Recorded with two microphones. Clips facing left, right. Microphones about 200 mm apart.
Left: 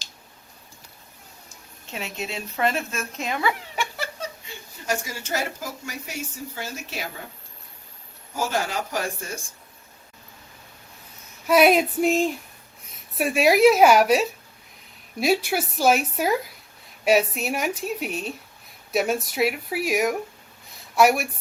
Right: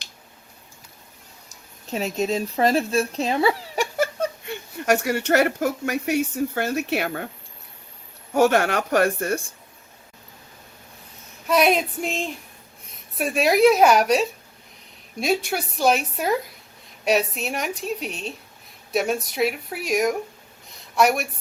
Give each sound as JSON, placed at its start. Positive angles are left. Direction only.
{"t": 1.5, "sound": "speech", "side_deg": -40}
{"t": 3.9, "sound": "speech", "side_deg": -50}
{"t": 8.3, "sound": "speech", "side_deg": -65}
{"t": 11.4, "sound": "a woman's voice", "side_deg": 5}